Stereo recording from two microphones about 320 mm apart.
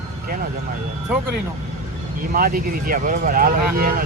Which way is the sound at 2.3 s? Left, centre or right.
Right.